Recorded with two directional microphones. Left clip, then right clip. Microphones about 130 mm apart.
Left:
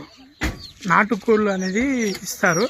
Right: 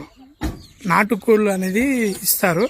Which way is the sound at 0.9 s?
45° right (ahead or behind).